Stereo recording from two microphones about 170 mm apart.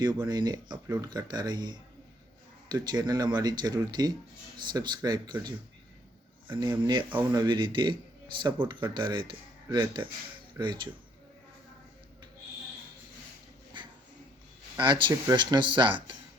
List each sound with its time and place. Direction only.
0.0 s speech: 25° right (ahead or behind)
14.8 s speech: 30° right (ahead or behind)